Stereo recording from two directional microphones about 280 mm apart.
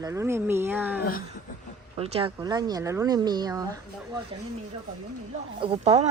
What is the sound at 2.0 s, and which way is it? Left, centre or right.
Speech, centre.